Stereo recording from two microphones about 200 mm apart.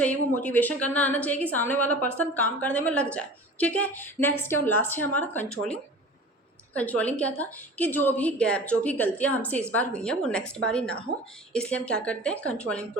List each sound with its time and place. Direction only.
0.0 s a woman's voice: 5° left (ahead or behind)
6.7 s a woman's voice: 5° left (ahead or behind)